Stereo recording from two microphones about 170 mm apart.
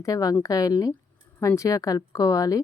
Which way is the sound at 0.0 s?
20° left (ahead or behind).